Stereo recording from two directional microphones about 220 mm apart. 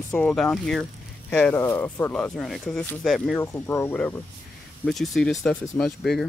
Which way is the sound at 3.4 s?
10° left (ahead or behind).